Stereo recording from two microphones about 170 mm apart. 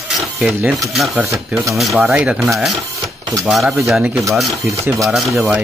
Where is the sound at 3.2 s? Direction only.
20° right (ahead or behind).